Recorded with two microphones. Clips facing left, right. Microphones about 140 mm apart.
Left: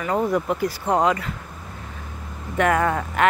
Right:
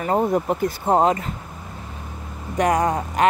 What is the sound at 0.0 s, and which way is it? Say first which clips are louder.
Speech: right 2 dB; 30° right (ahead or behind).